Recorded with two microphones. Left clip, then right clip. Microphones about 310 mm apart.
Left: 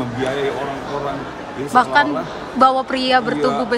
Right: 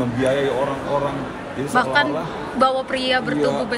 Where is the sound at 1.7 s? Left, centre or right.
Centre.